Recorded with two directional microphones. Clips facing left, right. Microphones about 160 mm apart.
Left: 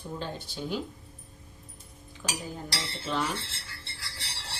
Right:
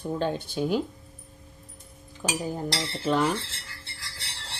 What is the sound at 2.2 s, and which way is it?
Speech, 40° right (ahead or behind).